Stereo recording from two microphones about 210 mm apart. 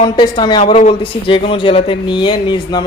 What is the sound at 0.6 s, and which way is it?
Speech, 35° left (ahead or behind).